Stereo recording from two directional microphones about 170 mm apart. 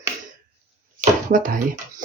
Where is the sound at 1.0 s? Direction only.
55° right (ahead or behind).